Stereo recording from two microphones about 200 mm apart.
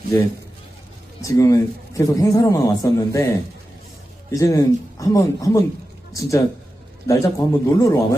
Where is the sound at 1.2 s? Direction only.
15° left (ahead or behind).